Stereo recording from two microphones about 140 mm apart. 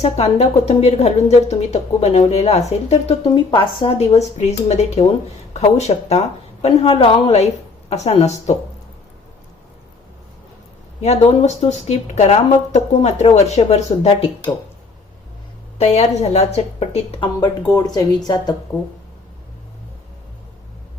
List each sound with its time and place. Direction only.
0.0 s speech: 50° left (ahead or behind)
3.2 s speech: 35° left (ahead or behind); by 8.5 s 50° left (ahead or behind)
11.0 s speech: 50° left (ahead or behind)
15.8 s speech: 50° left (ahead or behind)
17.7 s speech: 30° left (ahead or behind)